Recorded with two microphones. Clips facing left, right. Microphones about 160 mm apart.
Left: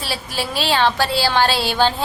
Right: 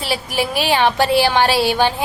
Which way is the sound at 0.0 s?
15° right (ahead or behind).